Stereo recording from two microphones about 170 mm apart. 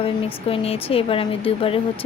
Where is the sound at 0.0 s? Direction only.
35° left (ahead or behind).